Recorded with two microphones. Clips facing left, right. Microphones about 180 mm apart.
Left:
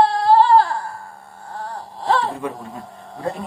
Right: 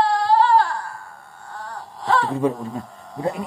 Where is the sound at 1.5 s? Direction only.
35° left (ahead or behind).